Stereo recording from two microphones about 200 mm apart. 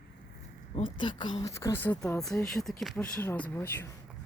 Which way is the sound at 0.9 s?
25° left (ahead or behind).